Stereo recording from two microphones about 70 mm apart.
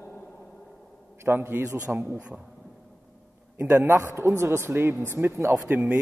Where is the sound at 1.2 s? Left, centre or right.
Right.